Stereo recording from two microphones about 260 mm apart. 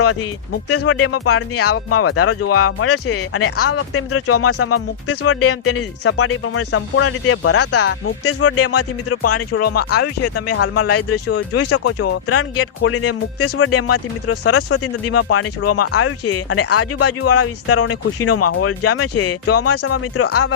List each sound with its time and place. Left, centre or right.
0.7 s speech: left
9.6 s speech: left
10.8 s speech: left
20.2 s speech: left